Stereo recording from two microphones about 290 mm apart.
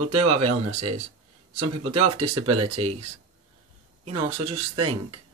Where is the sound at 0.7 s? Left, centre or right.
Right.